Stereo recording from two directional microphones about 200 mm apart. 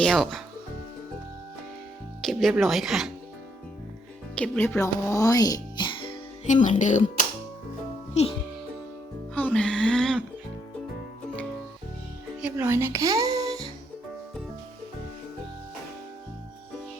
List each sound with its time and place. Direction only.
0.0 s music: centre (ahead or behind)
2.2 s music: centre (ahead or behind)
4.4 s a child's voice: 5° left (ahead or behind); by 8.4 s 30° left (ahead or behind)
9.3 s music: 5° left (ahead or behind)
12.4 s a child's voice: 10° right (ahead or behind)